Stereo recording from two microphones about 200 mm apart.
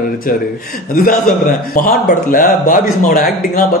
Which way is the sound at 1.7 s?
45° left (ahead or behind).